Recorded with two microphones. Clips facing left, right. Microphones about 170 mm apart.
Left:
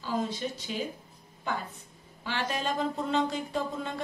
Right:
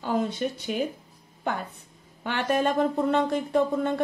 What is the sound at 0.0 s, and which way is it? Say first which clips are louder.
Speech: right 5 dB; 60° right (ahead or behind).